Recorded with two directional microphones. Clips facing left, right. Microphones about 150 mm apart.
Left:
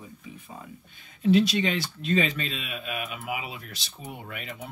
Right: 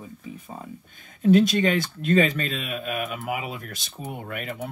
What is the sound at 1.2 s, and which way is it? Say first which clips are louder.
Speech: right 3 dB; 50° right (ahead or behind).